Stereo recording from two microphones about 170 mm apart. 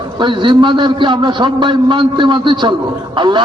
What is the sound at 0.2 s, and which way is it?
A man's voice, 30° right (ahead or behind).